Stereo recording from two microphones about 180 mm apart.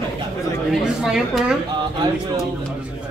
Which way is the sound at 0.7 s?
Centre (ahead or behind).